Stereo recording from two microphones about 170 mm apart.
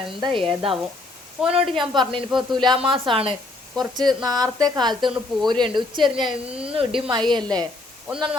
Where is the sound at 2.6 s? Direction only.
30° right (ahead or behind).